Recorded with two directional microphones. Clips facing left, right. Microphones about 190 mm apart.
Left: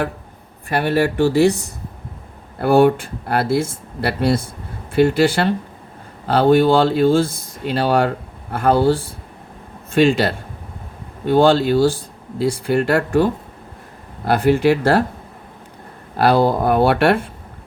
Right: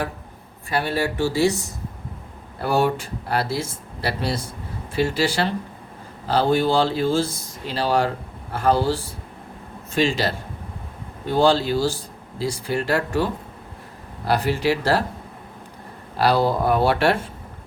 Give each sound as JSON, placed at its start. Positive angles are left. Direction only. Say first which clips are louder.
{"t": 0.7, "sound": "speech", "louder": "left 6 dB", "side_deg": 60}
{"t": 16.1, "sound": "speech", "louder": "left 4 dB", "side_deg": 55}